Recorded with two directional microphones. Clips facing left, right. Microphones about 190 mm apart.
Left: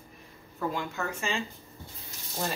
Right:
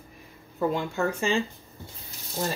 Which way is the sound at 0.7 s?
30° right (ahead or behind).